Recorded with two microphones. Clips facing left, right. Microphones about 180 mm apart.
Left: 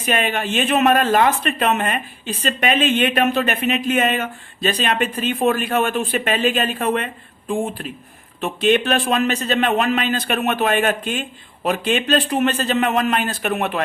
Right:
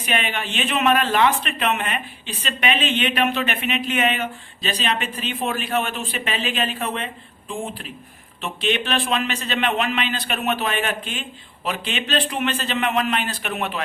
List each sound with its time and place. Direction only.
0.0 s speech: 45° left (ahead or behind)
8.4 s speech: 45° left (ahead or behind)